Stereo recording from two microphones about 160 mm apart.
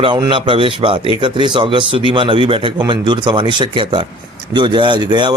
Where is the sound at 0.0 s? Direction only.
30° right (ahead or behind).